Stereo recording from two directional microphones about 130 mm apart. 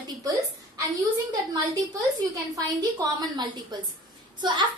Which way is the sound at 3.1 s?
35° right (ahead or behind).